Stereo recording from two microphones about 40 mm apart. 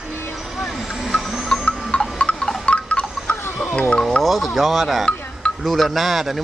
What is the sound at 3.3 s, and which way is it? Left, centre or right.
Music, left.